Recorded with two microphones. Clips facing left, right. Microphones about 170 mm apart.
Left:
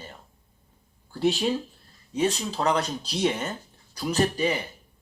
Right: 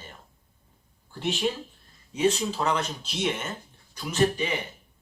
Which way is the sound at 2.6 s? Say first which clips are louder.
Left 3 dB; 35° left (ahead or behind).